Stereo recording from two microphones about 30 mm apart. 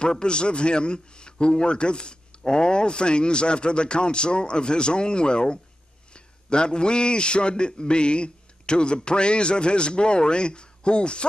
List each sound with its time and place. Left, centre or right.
0.0 s a man's voice: left